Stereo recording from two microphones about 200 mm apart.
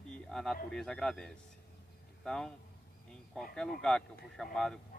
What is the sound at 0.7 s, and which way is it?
Speech, 5° left (ahead or behind).